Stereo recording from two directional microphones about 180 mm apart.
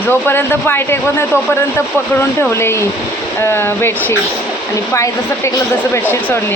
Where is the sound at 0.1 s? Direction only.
10° left (ahead or behind).